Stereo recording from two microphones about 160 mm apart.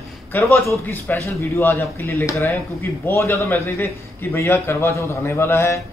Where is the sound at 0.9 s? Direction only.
15° left (ahead or behind).